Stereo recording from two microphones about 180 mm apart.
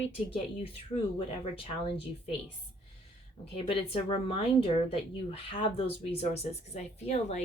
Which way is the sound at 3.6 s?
30° left (ahead or behind).